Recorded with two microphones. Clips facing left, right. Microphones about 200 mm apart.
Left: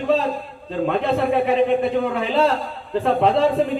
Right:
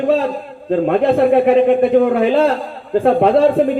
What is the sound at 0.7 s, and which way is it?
A man's voice, 55° right (ahead or behind).